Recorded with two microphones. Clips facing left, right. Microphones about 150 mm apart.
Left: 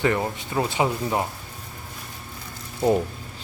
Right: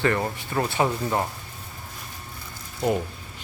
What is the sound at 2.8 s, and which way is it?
Speech, 20° left (ahead or behind).